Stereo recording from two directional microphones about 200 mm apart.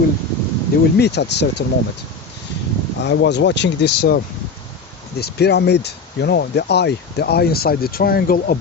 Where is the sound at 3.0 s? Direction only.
60° left (ahead or behind).